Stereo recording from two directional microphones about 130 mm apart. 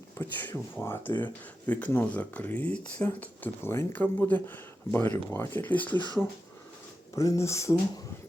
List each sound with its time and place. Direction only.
0.2 s speech: 15° left (ahead or behind)
7.2 s speech: 25° left (ahead or behind)